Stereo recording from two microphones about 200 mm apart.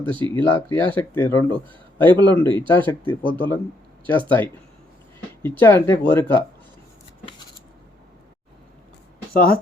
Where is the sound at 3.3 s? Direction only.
10° left (ahead or behind).